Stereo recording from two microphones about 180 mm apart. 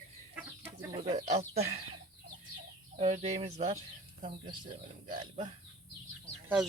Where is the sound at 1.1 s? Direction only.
35° right (ahead or behind).